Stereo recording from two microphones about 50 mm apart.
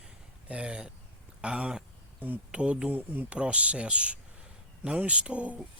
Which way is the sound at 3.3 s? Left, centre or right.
Right.